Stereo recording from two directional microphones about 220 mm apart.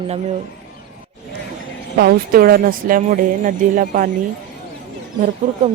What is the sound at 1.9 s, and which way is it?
A woman's voice, 45° right (ahead or behind).